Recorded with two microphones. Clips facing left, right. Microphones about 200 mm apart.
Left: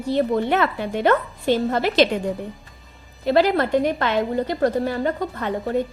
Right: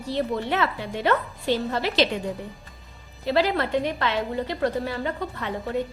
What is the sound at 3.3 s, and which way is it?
A woman's voice, 50° left (ahead or behind).